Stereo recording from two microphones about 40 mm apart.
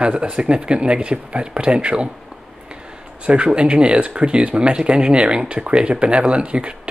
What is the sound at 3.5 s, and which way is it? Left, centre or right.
Speech, right.